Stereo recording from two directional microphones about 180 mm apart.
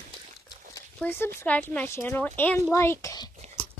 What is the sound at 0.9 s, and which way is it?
Speech, 10° left (ahead or behind).